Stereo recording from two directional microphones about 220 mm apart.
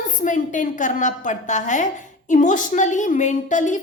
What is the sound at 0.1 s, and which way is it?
A woman's voice, 35° left (ahead or behind).